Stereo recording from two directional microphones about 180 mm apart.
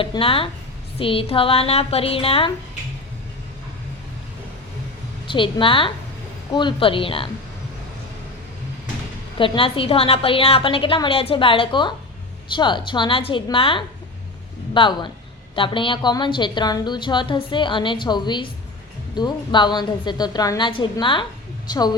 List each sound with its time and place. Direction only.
0.0 s a woman's voice: 30° left (ahead or behind)
5.3 s a woman's voice: 30° left (ahead or behind)
9.4 s a woman's voice: 30° left (ahead or behind)